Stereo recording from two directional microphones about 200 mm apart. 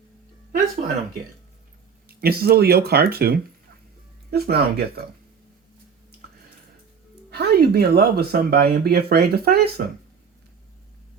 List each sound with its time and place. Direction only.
2.0 s speech: 50° right (ahead or behind)
7.3 s speech: 55° right (ahead or behind)